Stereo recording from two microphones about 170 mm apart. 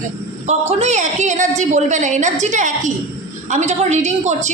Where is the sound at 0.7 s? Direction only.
40° right (ahead or behind).